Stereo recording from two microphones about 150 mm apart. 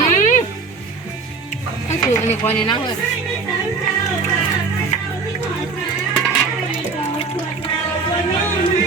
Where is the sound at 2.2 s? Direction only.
45° left (ahead or behind).